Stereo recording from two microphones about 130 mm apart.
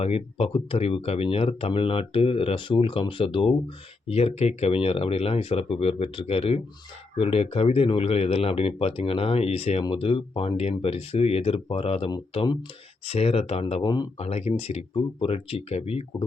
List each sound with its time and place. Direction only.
0.0 s speech: 50° left (ahead or behind)
13.8 s speech: 30° left (ahead or behind)
14.2 s speech: 55° left (ahead or behind)